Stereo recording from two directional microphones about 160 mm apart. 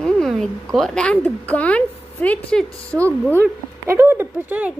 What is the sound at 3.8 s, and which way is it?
Speech, 20° right (ahead or behind).